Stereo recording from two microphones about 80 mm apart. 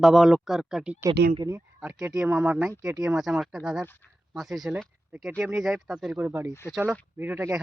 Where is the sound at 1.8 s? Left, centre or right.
Centre.